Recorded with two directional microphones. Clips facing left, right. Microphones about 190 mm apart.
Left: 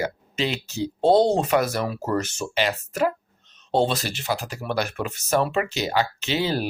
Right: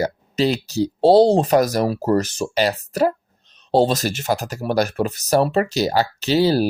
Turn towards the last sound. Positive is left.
turn(degrees=-35)  # may be behind; listen again after turning